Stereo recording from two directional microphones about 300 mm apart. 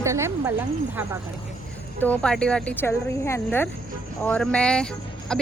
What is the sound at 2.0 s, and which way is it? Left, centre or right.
Speech, centre.